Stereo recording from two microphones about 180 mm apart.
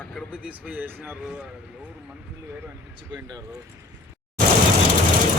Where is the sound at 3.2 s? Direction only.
20° right (ahead or behind).